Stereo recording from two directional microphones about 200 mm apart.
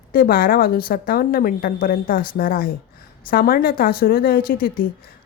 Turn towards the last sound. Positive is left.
turn(degrees=45)  # may be behind; listen again after turning